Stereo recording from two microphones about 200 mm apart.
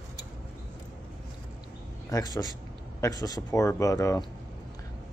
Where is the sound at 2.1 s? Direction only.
20° left (ahead or behind).